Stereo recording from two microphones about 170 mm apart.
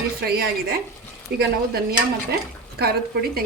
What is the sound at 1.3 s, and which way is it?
Dishes, 65° right (ahead or behind).